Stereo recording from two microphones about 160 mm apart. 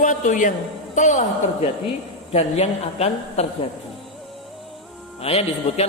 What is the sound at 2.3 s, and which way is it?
A man's voice, 40° left (ahead or behind).